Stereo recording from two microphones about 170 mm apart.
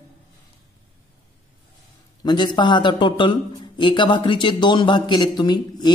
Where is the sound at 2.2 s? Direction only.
25° left (ahead or behind).